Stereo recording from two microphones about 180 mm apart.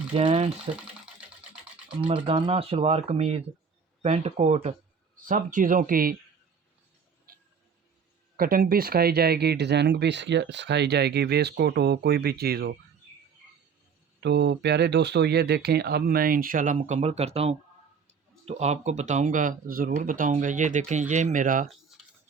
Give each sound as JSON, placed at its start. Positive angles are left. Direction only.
{"t": 0.1, "sound": "speech", "side_deg": -30}
{"t": 2.0, "sound": "speech", "side_deg": -30}
{"t": 5.2, "sound": "speech", "side_deg": -50}
{"t": 7.3, "sound": "a sound", "side_deg": -55}
{"t": 8.4, "sound": "speech", "side_deg": -55}
{"t": 14.2, "sound": "speech", "side_deg": -70}
{"t": 22.0, "sound": "tick-tock", "side_deg": 0}